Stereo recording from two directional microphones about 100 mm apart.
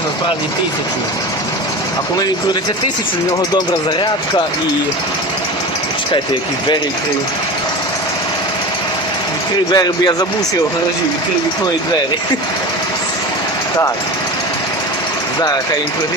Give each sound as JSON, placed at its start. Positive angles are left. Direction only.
{"t": 9.7, "sound": "speech", "side_deg": 45}
{"t": 15.4, "sound": "speech", "side_deg": 40}